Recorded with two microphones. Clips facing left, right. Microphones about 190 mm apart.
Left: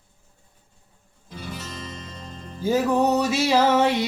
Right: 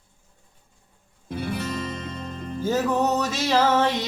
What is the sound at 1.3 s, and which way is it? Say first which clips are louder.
Music: right 8 dB; 60° right (ahead or behind).